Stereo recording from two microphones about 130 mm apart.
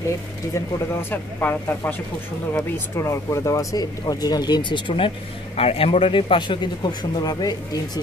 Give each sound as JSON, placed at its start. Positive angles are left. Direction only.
{"t": 0.7, "sound": "speech", "side_deg": 15}
{"t": 3.0, "sound": "speech", "side_deg": 20}